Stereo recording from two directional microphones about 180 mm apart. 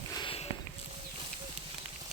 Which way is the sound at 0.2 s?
30° left (ahead or behind).